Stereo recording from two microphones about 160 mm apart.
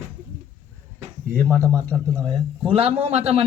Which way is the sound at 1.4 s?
10° left (ahead or behind).